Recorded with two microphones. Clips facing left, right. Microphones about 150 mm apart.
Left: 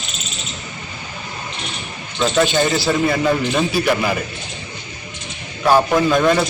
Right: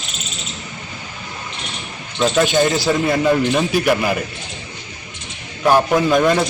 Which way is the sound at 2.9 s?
Centre (ahead or behind).